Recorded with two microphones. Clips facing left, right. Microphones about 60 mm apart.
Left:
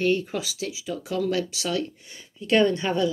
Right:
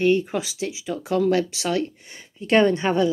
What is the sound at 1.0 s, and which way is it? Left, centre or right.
Speech, right.